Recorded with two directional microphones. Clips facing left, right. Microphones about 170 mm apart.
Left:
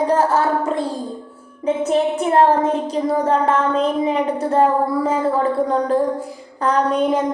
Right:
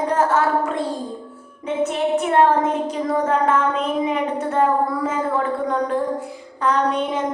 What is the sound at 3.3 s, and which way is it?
A woman's voice, 35° left (ahead or behind).